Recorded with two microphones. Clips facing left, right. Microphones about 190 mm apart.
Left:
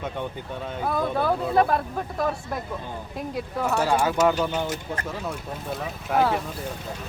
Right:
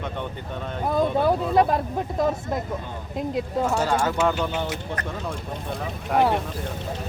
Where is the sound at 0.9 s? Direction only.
20° right (ahead or behind).